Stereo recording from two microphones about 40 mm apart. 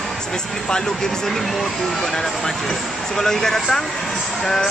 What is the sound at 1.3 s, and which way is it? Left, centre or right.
Speech, centre.